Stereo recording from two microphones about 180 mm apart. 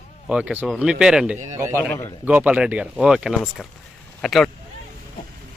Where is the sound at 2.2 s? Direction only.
10° right (ahead or behind).